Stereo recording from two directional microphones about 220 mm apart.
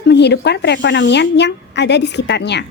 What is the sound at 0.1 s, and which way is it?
Speech, 50° left (ahead or behind).